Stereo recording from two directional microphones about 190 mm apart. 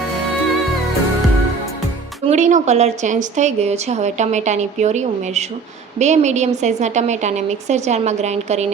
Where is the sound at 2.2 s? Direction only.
35° right (ahead or behind).